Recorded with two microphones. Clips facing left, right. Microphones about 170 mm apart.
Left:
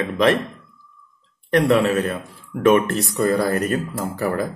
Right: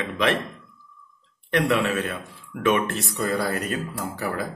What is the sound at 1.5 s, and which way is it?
Speech, 40° left (ahead or behind).